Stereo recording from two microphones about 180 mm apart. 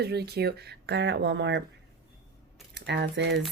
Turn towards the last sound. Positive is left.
turn(degrees=-70)  # may be behind; listen again after turning